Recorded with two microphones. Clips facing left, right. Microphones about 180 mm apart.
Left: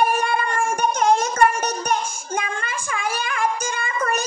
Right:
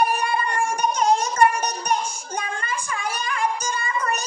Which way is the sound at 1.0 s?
55° left (ahead or behind).